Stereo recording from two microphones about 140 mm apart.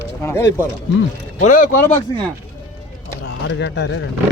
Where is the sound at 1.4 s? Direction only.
70° left (ahead or behind).